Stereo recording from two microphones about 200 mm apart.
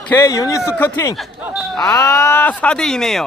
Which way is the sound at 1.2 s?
Centre (ahead or behind).